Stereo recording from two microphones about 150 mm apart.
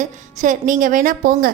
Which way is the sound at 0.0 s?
55° right (ahead or behind).